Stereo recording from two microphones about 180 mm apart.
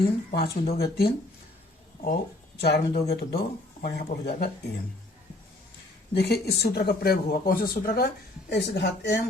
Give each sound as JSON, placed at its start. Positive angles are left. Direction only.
{"t": 0.0, "sound": "speech", "side_deg": 60}
{"t": 2.6, "sound": "speech", "side_deg": 65}
{"t": 6.1, "sound": "speech", "side_deg": 65}